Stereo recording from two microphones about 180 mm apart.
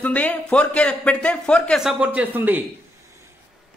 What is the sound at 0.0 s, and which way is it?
Speech, 10° left (ahead or behind).